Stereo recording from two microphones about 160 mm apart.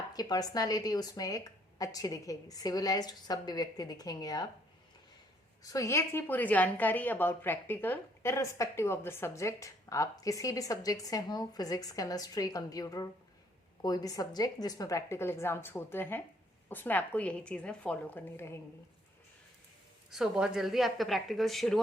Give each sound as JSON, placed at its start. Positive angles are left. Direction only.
{"t": 0.1, "sound": "a woman's voice", "side_deg": 25}
{"t": 5.6, "sound": "a woman's voice", "side_deg": 20}
{"t": 20.1, "sound": "a woman's voice", "side_deg": -5}